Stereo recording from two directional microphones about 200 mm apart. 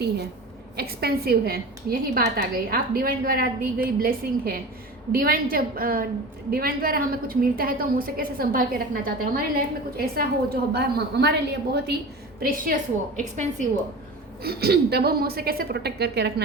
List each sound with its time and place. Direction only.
0.8 s a woman's voice: 50° right (ahead or behind)
14.4 s a woman's voice: 55° right (ahead or behind)